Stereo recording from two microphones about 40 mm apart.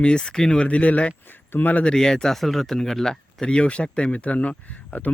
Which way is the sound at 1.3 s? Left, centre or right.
Left.